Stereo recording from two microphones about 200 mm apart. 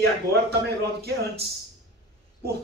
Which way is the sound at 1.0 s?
55° right (ahead or behind).